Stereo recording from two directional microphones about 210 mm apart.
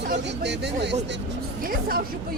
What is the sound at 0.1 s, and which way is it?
Speech, 55° right (ahead or behind).